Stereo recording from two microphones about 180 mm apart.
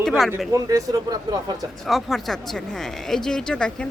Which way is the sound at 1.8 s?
Centre (ahead or behind).